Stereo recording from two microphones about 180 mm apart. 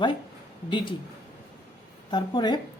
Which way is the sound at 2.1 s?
25° left (ahead or behind).